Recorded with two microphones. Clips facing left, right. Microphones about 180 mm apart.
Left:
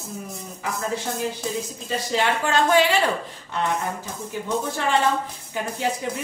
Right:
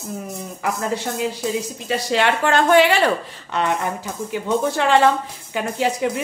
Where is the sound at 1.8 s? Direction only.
75° right (ahead or behind).